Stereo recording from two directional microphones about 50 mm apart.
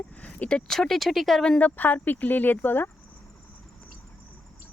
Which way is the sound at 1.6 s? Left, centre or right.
Left.